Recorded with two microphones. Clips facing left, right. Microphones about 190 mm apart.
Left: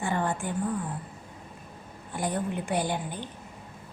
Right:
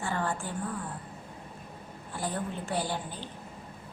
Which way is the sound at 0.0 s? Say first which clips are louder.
Left 3 dB; 20° left (ahead or behind).